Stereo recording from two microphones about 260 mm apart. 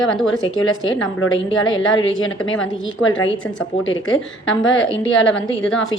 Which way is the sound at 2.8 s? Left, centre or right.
Left.